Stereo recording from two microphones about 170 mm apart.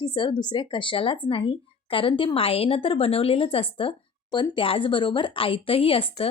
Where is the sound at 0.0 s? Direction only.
25° left (ahead or behind).